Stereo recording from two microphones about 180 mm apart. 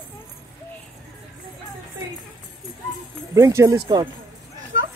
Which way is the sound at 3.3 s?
15° right (ahead or behind).